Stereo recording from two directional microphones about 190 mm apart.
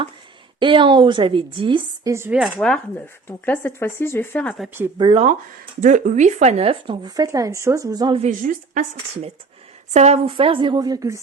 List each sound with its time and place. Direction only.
0.6 s speech: 25° right (ahead or behind)
2.1 s speech: 10° right (ahead or behind)
2.4 s speech: 5° left (ahead or behind)
4.9 s speech: 30° right (ahead or behind)
5.8 s speech: 40° right (ahead or behind); by 8.2 s 20° right (ahead or behind)
8.2 s speech: 45° right (ahead or behind); by 11.2 s 20° right (ahead or behind)